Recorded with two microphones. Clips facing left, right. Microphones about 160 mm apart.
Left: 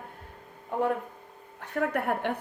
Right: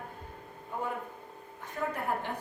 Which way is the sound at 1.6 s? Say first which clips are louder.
Left 6 dB; 70° left (ahead or behind).